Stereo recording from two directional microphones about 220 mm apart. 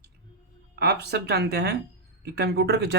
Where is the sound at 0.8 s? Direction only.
50° right (ahead or behind).